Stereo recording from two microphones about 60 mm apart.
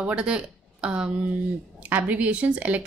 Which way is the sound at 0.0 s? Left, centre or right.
Centre.